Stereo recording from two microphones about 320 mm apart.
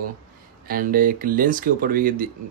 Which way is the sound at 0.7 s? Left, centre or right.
Right.